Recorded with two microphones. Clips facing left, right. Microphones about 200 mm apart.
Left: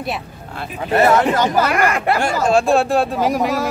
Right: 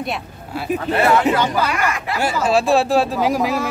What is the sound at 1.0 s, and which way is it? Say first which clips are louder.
Speech: left 2 dB; 45° left (ahead or behind).